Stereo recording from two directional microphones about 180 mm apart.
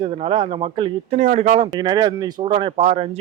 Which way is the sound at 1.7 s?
25° right (ahead or behind).